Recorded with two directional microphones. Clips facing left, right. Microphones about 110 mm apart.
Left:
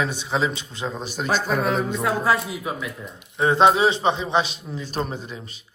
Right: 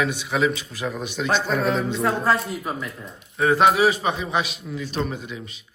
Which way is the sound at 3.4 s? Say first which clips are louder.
Even; 25° left (ahead or behind).